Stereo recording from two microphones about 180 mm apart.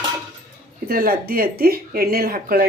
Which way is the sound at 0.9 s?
55° right (ahead or behind).